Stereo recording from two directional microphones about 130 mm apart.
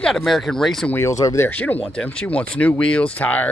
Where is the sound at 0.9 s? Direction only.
20° left (ahead or behind).